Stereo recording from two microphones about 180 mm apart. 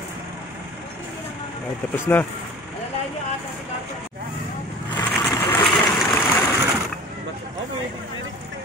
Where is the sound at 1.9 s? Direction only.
15° left (ahead or behind).